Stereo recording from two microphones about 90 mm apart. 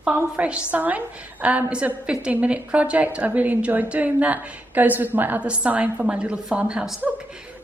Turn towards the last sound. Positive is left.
turn(degrees=-20)  # may be behind; listen again after turning